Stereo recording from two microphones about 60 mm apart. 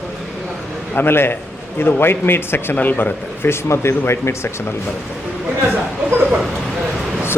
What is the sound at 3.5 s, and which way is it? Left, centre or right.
Speech, left.